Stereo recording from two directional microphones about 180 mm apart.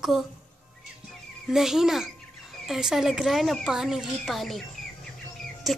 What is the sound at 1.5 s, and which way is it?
Female singing, 5° right (ahead or behind).